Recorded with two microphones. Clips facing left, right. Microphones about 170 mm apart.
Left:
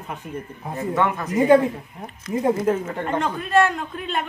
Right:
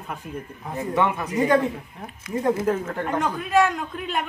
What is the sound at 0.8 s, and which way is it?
Speech, 15° right (ahead or behind).